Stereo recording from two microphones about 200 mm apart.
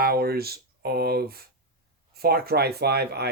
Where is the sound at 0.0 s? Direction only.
50° right (ahead or behind).